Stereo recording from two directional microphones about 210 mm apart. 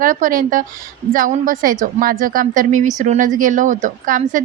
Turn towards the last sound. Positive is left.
turn(degrees=-40)  # may be behind; listen again after turning